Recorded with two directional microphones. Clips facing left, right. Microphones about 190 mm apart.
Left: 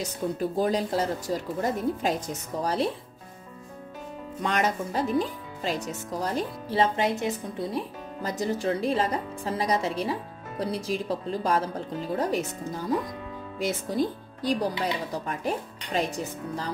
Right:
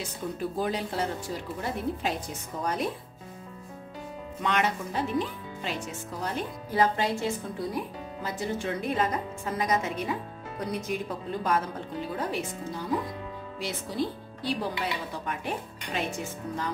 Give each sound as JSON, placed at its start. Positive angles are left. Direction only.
{"t": 0.6, "sound": "speech", "side_deg": 40}
{"t": 4.4, "sound": "speech", "side_deg": 40}
{"t": 8.2, "sound": "a woman's voice", "side_deg": 40}